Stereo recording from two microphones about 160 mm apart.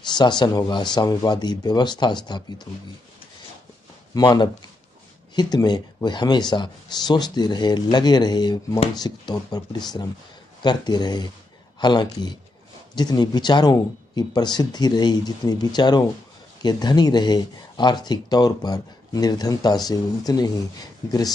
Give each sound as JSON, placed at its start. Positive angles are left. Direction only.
{"t": 0.1, "sound": "speech", "side_deg": 25}
{"t": 4.1, "sound": "speech", "side_deg": 25}